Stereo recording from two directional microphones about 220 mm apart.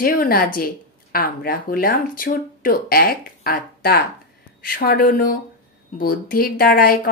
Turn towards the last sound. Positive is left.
turn(degrees=40)  # may be behind; listen again after turning